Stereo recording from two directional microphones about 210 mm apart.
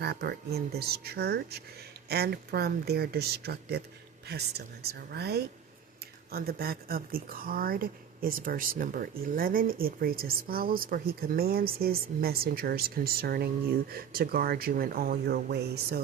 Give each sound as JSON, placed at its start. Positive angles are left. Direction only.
{"t": 0.0, "sound": "speech", "side_deg": -50}